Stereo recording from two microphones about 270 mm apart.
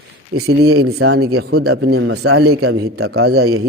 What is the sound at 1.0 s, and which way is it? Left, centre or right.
Speech, right.